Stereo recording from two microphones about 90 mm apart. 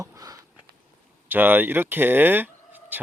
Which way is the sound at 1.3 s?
20° right (ahead or behind).